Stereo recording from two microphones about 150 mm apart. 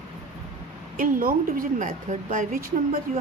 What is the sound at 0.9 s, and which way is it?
A woman's voice, 70° right (ahead or behind).